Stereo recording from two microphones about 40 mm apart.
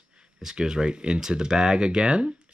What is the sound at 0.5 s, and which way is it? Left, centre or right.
Speech, centre.